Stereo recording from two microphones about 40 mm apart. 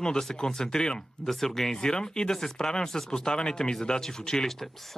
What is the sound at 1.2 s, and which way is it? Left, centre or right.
Speech, centre.